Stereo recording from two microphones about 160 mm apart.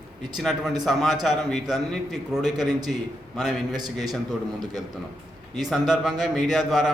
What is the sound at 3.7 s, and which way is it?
Speech, 25° right (ahead or behind).